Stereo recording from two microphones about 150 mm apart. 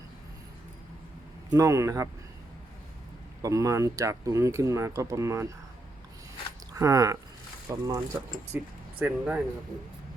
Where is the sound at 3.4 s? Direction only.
20° right (ahead or behind).